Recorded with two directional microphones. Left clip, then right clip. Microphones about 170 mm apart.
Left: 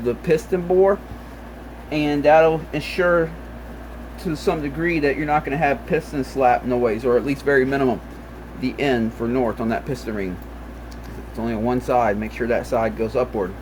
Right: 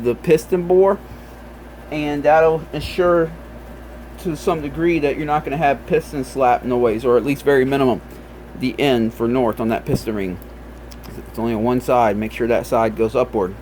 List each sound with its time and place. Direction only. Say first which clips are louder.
0.0 s speech: right 4 dB; 45° right (ahead or behind)
1.9 s speech: even; 5° right (ahead or behind); by 10.2 s 45° right (ahead or behind)
11.3 s speech: right 3 dB; 45° right (ahead or behind)